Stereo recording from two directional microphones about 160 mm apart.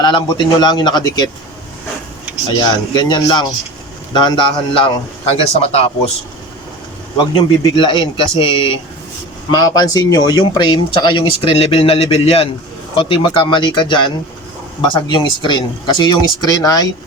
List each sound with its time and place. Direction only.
0.0 s speech: 30° left (ahead or behind)
2.6 s a man's voice: 25° left (ahead or behind)
7.6 s a man's voice: 30° left (ahead or behind)
9.5 s speech: 25° left (ahead or behind)